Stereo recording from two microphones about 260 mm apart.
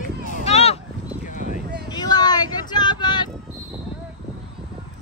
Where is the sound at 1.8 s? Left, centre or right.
Centre.